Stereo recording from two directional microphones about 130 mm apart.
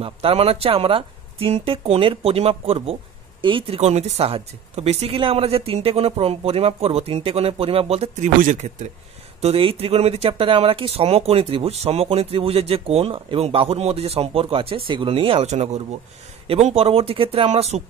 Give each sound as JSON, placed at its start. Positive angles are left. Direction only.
{"t": 0.0, "sound": "speech", "side_deg": -50}
{"t": 8.4, "sound": "speech", "side_deg": -75}
{"t": 9.4, "sound": "speech", "side_deg": -45}